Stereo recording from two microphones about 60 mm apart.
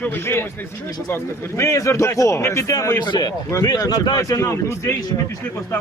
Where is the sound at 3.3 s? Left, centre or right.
Left.